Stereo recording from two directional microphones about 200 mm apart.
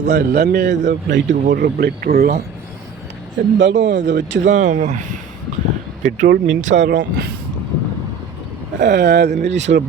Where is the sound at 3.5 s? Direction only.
65° right (ahead or behind).